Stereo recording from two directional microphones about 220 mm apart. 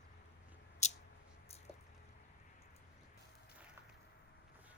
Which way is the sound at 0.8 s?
30° left (ahead or behind).